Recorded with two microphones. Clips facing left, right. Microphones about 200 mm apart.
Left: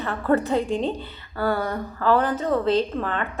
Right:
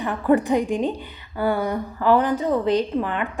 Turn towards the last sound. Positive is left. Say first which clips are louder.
# right 1 dB
turn(degrees=-15)  # may be behind; listen again after turning